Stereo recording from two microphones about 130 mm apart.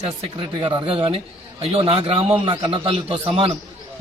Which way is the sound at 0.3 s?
40° right (ahead or behind).